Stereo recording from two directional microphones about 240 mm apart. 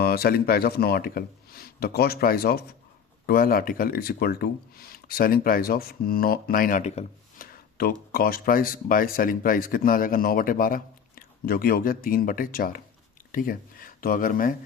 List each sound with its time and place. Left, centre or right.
0.0 s speech: left